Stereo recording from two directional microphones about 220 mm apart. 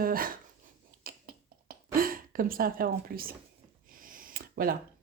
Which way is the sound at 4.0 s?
40° right (ahead or behind).